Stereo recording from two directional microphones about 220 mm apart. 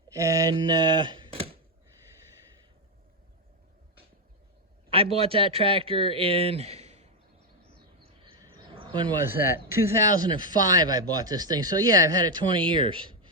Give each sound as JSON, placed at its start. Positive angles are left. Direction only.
{"t": 0.1, "sound": "speech", "side_deg": -15}
{"t": 4.9, "sound": "speech", "side_deg": -25}
{"t": 8.0, "sound": "a sound", "side_deg": -25}
{"t": 9.0, "sound": "speech", "side_deg": -10}